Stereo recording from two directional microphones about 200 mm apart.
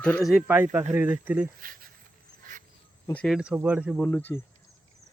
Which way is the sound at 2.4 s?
40° right (ahead or behind).